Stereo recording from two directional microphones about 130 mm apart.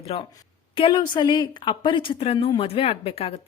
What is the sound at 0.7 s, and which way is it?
A woman's voice, 40° left (ahead or behind).